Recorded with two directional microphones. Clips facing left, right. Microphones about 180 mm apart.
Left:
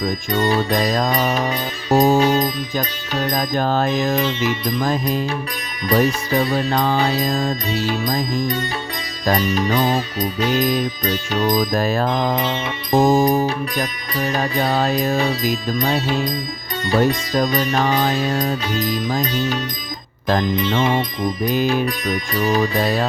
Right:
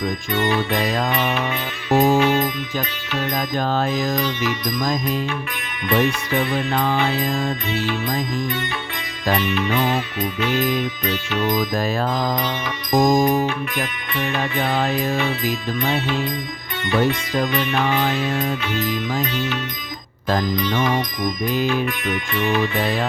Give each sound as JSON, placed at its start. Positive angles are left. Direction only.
{"t": 0.0, "sound": "music", "side_deg": 40}
{"t": 4.1, "sound": "music", "side_deg": 25}
{"t": 12.0, "sound": "music", "side_deg": 25}
{"t": 20.6, "sound": "music", "side_deg": 25}